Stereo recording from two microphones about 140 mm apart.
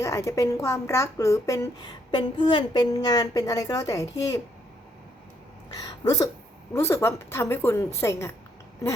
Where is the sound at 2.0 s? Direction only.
35° left (ahead or behind).